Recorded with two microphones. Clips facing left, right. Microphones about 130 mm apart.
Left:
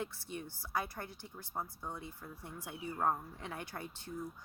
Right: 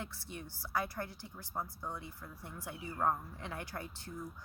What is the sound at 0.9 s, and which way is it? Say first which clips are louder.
Speech: right 3 dB; 20° left (ahead or behind).